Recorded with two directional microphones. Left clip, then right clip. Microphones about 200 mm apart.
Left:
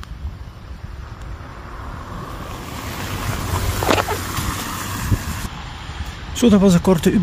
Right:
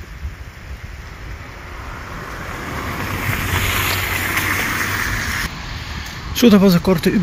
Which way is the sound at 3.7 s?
65° left (ahead or behind).